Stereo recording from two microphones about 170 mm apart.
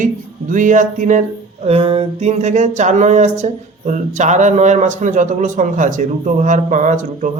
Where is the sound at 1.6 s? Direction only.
35° right (ahead or behind).